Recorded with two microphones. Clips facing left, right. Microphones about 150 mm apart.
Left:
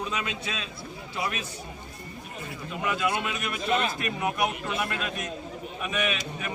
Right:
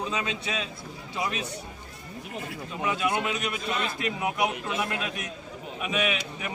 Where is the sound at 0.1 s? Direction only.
20° right (ahead or behind).